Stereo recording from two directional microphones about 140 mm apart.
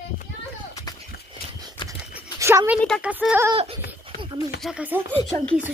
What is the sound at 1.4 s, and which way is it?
Horse, 90° left.